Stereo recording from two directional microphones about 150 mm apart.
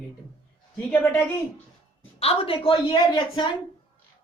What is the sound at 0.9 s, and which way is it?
Speech, 10° left (ahead or behind).